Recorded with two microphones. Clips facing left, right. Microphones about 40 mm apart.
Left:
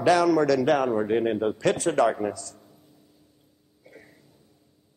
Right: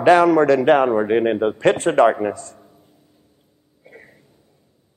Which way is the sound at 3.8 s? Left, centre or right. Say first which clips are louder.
Right 5 dB; right.